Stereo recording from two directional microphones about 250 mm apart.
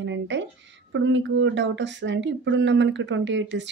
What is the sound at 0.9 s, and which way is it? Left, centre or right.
A woman's voice, right.